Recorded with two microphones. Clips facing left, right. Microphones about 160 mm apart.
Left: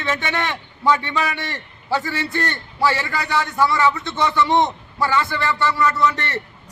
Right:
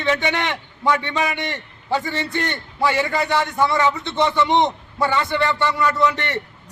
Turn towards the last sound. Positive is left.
turn(degrees=-20)  # may be behind; listen again after turning